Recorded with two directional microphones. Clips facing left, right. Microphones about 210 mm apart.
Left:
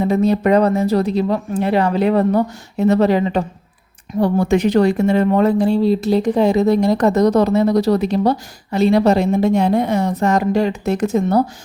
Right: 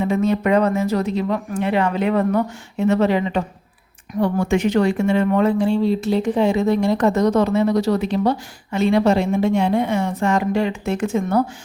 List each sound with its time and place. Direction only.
0.0 s speech: 35° left (ahead or behind)